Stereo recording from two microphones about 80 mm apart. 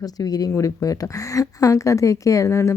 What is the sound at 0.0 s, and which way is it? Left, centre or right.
A woman's voice, left.